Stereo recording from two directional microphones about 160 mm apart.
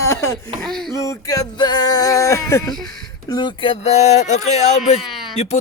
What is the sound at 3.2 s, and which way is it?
Speech, 25° left (ahead or behind).